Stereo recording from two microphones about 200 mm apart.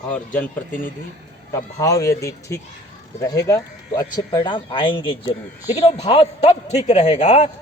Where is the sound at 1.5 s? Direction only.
15° left (ahead or behind).